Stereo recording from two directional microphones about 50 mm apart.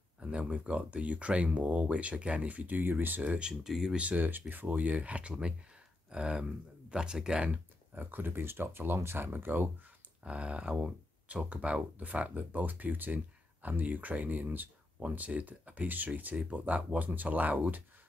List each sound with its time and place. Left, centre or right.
0.2 s speech: right
3.3 s speech: right
3.6 s speech: centre
3.9 s speech: right
4.2 s speech: right; by 7.5 s centre
7.5 s speech: right
10.2 s speech: right